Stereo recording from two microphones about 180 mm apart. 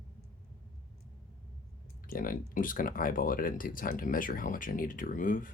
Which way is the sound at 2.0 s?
50° left (ahead or behind).